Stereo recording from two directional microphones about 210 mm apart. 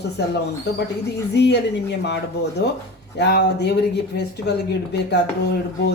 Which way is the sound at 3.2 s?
50° left (ahead or behind).